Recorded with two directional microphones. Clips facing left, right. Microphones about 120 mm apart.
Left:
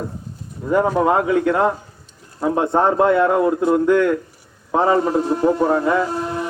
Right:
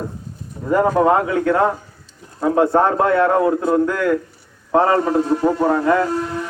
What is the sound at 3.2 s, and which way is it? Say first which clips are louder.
A man's voice: even; 5° left (ahead or behind).